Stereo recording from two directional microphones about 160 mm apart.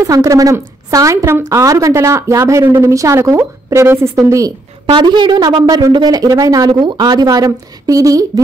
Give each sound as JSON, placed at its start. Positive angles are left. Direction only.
{"t": 0.0, "sound": "a woman's voice", "side_deg": -20}